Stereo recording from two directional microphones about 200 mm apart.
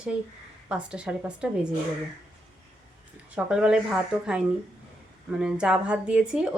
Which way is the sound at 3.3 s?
5° right (ahead or behind).